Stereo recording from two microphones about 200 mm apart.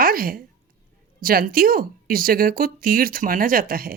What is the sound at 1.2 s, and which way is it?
Speech, 45° right (ahead or behind).